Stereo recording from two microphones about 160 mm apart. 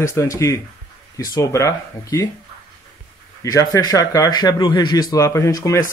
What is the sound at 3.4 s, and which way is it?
A man's voice, 20° left (ahead or behind).